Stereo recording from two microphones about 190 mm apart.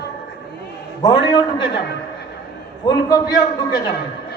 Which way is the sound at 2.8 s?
20° left (ahead or behind).